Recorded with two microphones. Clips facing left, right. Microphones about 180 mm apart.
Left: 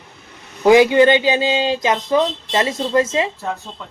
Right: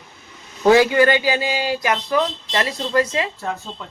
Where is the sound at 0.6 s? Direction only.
15° left (ahead or behind).